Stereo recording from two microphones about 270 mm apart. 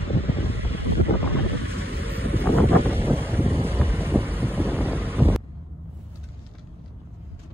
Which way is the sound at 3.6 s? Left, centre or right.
Centre.